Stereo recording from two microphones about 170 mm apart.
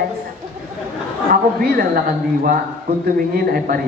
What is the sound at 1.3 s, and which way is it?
Speech, 60° right (ahead or behind).